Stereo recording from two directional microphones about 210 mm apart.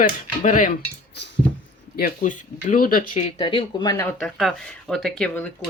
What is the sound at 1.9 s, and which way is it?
Speech, 40° left (ahead or behind).